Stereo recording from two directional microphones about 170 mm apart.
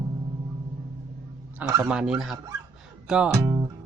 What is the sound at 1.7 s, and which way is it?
Speech, 10° right (ahead or behind).